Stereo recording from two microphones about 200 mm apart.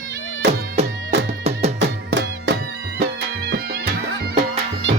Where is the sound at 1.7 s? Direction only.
60° right (ahead or behind).